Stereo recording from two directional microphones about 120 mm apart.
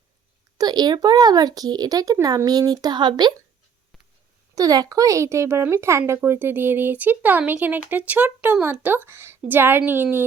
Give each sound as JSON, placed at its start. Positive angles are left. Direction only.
{"t": 0.6, "sound": "speech", "side_deg": -35}
{"t": 4.5, "sound": "speech", "side_deg": -30}